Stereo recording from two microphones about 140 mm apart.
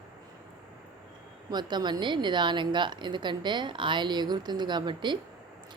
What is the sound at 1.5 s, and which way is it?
Speech, 30° right (ahead or behind).